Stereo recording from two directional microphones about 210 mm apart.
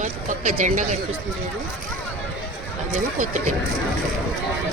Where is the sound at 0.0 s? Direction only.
35° right (ahead or behind).